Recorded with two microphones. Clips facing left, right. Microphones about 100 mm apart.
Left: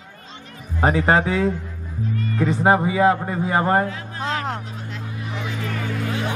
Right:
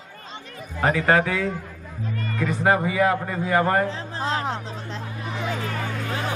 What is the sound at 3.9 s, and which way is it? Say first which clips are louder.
Speech: even; 30° right (ahead or behind).